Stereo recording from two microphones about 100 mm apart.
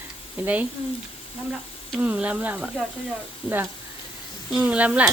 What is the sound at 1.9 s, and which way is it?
Speech, 15° right (ahead or behind).